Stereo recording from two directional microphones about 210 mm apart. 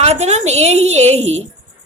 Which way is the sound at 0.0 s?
30° right (ahead or behind).